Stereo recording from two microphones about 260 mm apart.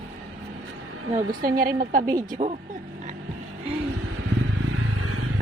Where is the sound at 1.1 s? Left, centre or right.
Right.